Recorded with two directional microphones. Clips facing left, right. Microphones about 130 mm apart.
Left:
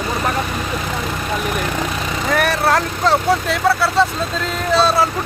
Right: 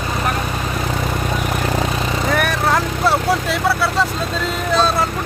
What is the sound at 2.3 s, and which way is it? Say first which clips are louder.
Speech: left 4 dB; centre (ahead or behind).